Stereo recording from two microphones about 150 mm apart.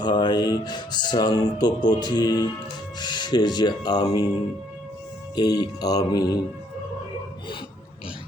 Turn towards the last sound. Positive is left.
turn(degrees=30)  # may be behind; listen again after turning